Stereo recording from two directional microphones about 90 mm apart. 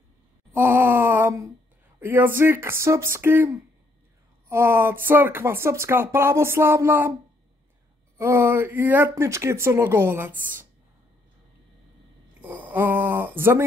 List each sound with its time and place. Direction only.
0.6 s groan: 20° right (ahead or behind)
2.0 s speech: 20° right (ahead or behind)
8.2 s speech: 30° right (ahead or behind)
12.4 s speech: 20° right (ahead or behind)